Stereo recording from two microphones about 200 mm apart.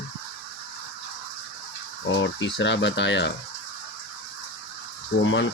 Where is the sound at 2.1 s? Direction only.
70° left (ahead or behind).